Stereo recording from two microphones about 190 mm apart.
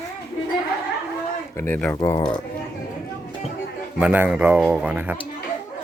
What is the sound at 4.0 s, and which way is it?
Speech, 5° right (ahead or behind).